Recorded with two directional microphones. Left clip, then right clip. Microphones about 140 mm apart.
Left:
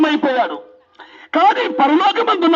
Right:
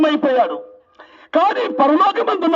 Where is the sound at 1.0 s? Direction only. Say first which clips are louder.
Left 2 dB; 55° right (ahead or behind).